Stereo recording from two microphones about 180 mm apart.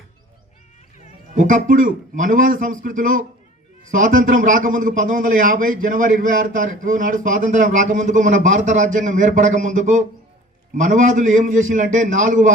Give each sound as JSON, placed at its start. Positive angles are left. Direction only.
{"t": 1.4, "sound": "a man's voice", "side_deg": -45}